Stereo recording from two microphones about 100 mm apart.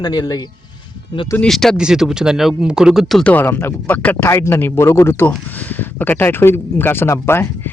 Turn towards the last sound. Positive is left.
turn(degrees=25)  # may be behind; listen again after turning